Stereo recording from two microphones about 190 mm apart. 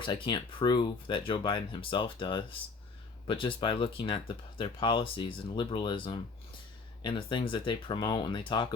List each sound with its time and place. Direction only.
0.0 s speech: 25° left (ahead or behind)